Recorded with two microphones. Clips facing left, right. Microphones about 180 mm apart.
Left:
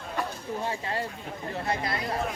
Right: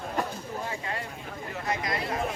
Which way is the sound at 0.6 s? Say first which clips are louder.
Left 6 dB; 30° left (ahead or behind).